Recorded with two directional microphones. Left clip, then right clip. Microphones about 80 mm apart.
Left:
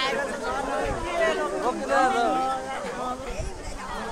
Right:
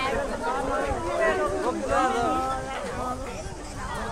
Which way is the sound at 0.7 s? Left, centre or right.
Left.